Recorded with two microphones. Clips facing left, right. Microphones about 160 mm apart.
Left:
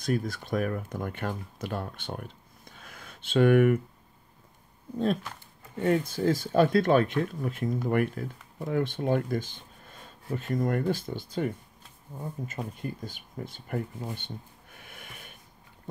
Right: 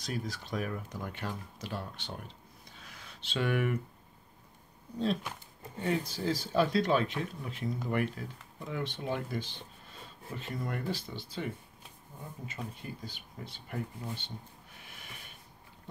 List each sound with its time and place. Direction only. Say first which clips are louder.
0.0 s speech: left 8 dB; 55° left (ahead or behind)
4.9 s speech: left 4 dB; 50° left (ahead or behind)